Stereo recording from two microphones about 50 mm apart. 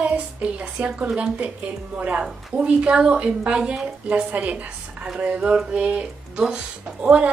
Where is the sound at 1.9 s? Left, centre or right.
Right.